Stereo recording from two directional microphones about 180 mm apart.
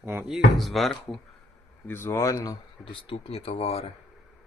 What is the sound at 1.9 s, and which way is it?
Speech, 10° left (ahead or behind).